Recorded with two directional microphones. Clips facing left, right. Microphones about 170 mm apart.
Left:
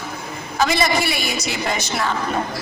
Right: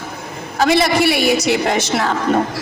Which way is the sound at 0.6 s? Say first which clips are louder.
Right 5 dB; 65° right (ahead or behind).